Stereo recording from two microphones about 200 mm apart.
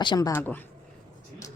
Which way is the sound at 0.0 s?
20° left (ahead or behind).